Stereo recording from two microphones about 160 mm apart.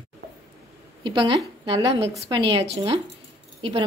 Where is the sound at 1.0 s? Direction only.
30° right (ahead or behind).